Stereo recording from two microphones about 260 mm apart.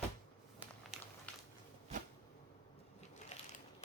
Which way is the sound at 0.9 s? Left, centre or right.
Centre.